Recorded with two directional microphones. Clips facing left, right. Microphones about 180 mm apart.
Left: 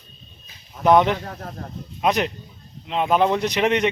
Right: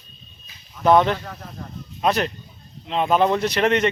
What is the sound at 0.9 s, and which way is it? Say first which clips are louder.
Speech: even; 15° left (ahead or behind).